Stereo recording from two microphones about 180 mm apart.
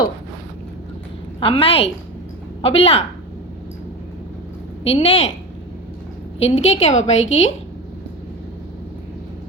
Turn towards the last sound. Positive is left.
turn(degrees=35)  # may be behind; listen again after turning